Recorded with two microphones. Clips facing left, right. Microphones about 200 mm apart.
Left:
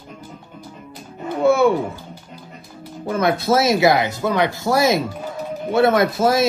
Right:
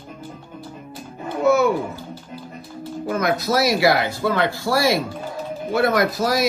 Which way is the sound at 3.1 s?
30° left (ahead or behind).